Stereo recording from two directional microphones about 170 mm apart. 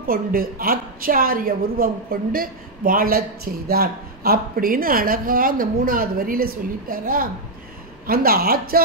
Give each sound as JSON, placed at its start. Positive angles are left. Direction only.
{"t": 0.0, "sound": "a woman's voice", "side_deg": -60}